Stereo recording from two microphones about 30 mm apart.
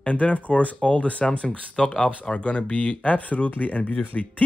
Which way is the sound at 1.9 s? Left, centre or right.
Left.